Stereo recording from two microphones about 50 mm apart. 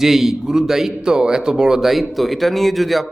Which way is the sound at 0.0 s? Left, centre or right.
Centre.